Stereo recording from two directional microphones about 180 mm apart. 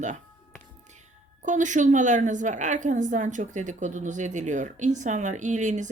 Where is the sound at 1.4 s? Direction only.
45° right (ahead or behind).